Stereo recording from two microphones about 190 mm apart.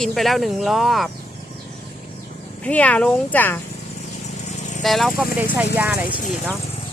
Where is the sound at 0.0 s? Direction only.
Centre (ahead or behind).